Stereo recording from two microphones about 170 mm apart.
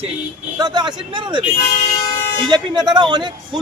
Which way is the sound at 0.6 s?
25° right (ahead or behind).